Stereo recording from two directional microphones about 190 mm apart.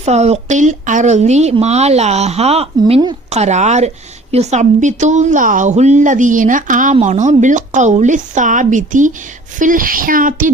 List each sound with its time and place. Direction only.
0.0 s a woman's voice: 35° right (ahead or behind)